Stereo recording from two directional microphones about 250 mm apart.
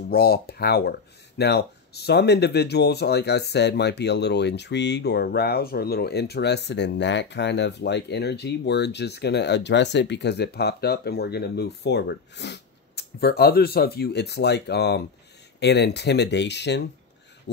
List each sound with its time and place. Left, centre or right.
0.1 s speech: left